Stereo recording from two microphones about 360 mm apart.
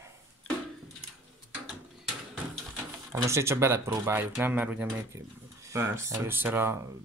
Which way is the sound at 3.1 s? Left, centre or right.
Centre.